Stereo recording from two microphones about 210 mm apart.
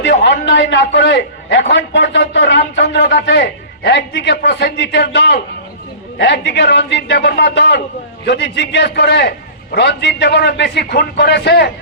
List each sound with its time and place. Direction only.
0.0 s a man's voice: 60° left (ahead or behind)